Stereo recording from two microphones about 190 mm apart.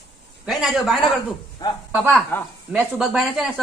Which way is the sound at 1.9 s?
10° right (ahead or behind).